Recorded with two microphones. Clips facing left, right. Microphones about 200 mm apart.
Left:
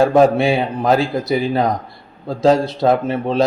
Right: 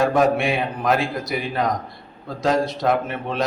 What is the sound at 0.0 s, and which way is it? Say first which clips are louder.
A man's voice: left 6 dB; 30° left (ahead or behind).